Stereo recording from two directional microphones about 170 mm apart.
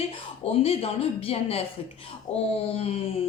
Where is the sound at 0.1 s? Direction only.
35° left (ahead or behind).